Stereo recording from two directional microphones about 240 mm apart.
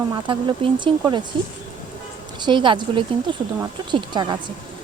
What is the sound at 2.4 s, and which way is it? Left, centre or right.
Speech, centre.